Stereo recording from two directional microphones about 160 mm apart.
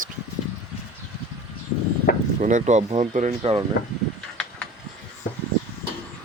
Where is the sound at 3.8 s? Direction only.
90° left.